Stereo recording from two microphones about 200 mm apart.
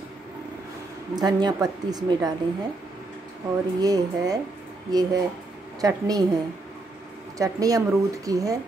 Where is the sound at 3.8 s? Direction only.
20° right (ahead or behind).